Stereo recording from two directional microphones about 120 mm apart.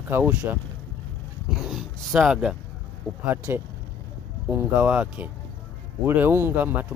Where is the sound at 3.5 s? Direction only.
20° right (ahead or behind).